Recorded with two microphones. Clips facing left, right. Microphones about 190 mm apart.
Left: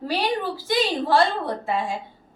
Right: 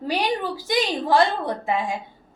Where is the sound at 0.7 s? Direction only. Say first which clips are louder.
Even; 15° right (ahead or behind).